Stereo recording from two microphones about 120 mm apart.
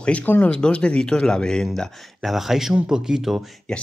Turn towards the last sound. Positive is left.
turn(degrees=0)  # may be behind; listen again after turning